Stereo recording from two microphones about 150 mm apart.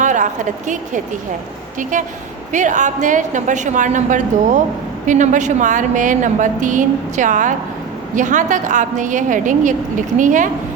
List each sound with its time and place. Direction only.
0.0 s a woman's voice: 55° right (ahead or behind)